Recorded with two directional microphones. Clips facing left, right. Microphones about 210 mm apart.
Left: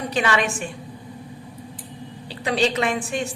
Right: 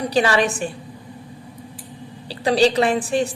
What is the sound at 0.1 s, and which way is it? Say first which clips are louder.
Speech: right 4 dB; 35° right (ahead or behind).